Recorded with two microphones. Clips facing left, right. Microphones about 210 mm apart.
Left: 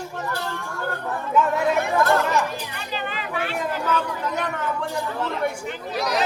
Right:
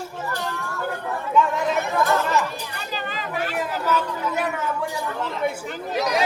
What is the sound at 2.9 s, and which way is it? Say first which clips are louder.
Chatter: left 1 dB; 40° right (ahead or behind).